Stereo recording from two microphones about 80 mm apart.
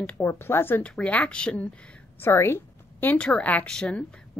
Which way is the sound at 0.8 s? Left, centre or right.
Centre.